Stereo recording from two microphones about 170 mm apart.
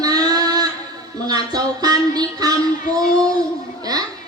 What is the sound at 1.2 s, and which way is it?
A woman's voice, 25° right (ahead or behind).